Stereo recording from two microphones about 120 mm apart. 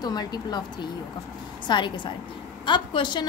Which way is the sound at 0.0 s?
35° left (ahead or behind).